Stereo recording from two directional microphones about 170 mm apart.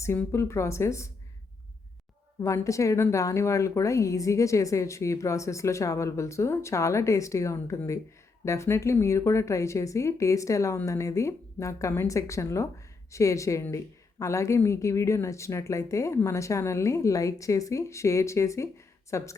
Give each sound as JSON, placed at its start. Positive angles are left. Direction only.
{"t": 0.0, "sound": "a woman's voice", "side_deg": 15}
{"t": 2.4, "sound": "a woman's voice", "side_deg": 15}